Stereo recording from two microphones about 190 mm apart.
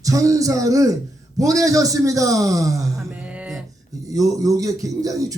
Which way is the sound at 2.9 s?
5° right (ahead or behind).